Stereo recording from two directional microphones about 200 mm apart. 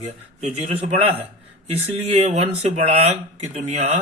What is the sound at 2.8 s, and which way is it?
Speech, 30° right (ahead or behind).